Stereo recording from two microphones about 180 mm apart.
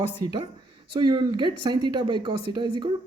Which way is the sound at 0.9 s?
25° right (ahead or behind).